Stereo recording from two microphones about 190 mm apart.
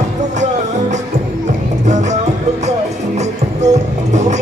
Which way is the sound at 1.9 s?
40° right (ahead or behind).